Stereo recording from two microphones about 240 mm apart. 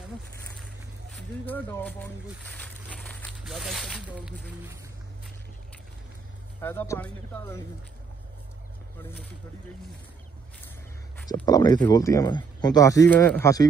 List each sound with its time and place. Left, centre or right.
1.1 s speech: centre
6.6 s speech: centre
11.3 s speech: centre